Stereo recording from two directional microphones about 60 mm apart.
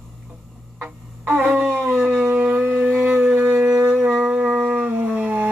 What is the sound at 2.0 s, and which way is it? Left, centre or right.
Shofar, right.